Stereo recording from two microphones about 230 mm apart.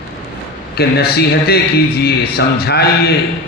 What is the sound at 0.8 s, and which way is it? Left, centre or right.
A man's voice, left.